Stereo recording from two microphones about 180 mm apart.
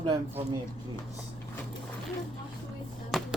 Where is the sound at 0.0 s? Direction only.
25° right (ahead or behind).